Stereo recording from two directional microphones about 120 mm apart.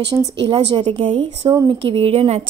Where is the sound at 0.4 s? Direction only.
45° right (ahead or behind).